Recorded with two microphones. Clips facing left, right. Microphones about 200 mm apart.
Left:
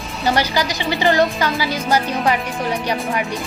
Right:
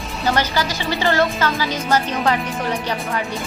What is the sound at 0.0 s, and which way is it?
Music, centre (ahead or behind).